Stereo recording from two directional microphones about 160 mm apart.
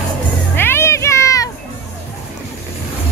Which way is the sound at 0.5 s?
15° left (ahead or behind).